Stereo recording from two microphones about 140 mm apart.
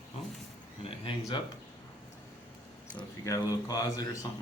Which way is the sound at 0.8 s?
35° left (ahead or behind).